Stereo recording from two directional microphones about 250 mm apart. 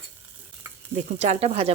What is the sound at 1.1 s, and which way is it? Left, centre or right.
Sizzle, right.